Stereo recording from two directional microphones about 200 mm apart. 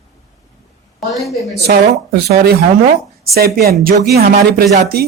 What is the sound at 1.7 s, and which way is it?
Speech, 50° right (ahead or behind).